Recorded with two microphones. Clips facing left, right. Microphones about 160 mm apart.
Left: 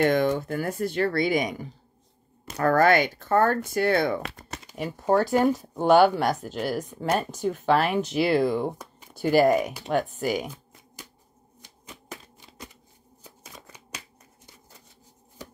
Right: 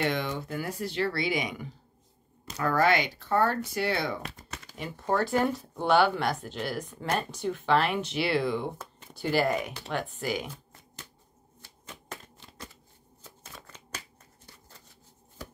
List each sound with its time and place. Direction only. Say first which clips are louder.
0.0 s speech: left 8 dB; 50° left (ahead or behind)
11.6 s typewriter: left 1 dB; 10° left (ahead or behind)
13.2 s shuffling cards: left 1 dB; 15° left (ahead or behind)